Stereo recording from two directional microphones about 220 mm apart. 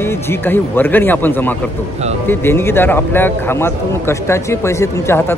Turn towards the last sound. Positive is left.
turn(degrees=10)  # may be behind; listen again after turning